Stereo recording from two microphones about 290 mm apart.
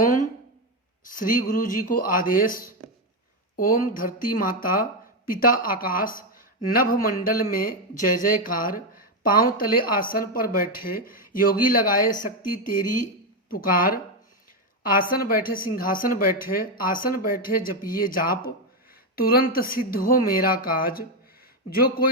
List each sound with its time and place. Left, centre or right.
1.0 s a woman's voice: left